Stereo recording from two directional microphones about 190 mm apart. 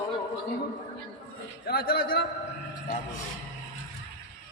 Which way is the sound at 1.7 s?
55° left (ahead or behind).